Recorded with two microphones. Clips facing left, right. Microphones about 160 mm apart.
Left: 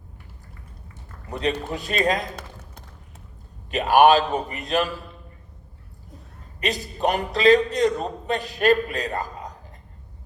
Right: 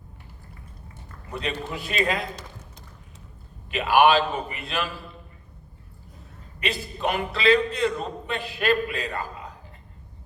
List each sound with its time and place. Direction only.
1.3 s a man's voice: 35° left (ahead or behind)
3.7 s a man's voice: 40° left (ahead or behind)
6.6 s a man's voice: 40° left (ahead or behind)